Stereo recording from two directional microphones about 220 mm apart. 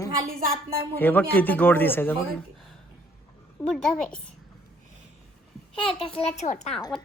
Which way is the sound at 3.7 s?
5° left (ahead or behind).